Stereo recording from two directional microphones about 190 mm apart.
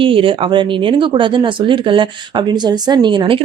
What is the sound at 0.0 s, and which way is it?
Speech, 30° right (ahead or behind).